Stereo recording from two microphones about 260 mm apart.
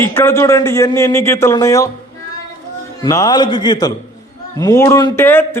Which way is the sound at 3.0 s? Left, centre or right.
Centre.